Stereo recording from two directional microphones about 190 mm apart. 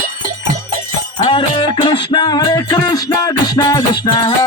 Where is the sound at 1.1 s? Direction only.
25° left (ahead or behind).